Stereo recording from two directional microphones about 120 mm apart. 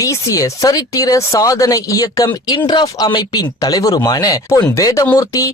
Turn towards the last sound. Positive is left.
turn(degrees=30)  # may be behind; listen again after turning